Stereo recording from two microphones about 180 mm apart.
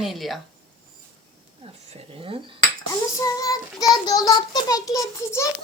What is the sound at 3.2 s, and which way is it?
Child singing, 20° left (ahead or behind).